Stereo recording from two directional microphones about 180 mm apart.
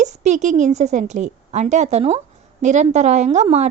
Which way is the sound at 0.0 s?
40° right (ahead or behind).